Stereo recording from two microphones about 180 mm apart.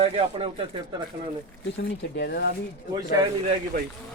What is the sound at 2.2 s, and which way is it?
Speech, 60° left (ahead or behind).